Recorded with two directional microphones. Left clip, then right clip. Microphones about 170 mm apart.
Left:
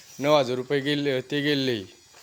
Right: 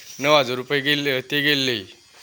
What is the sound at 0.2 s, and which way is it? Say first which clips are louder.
A man's voice: right 3 dB; 15° left (ahead or behind).